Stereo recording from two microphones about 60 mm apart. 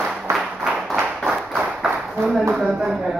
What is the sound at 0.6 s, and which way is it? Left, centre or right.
Clapping, centre.